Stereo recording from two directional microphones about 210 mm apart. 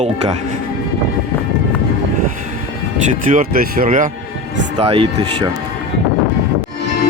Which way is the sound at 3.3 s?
45° right (ahead or behind).